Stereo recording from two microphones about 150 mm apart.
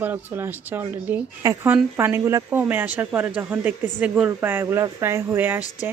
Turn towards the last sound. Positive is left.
turn(degrees=-15)  # may be behind; listen again after turning